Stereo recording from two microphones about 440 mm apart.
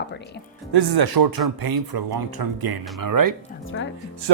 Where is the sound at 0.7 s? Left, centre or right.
Right.